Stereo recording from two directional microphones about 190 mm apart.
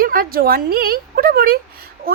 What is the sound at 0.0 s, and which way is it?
A woman's voice, 50° right (ahead or behind).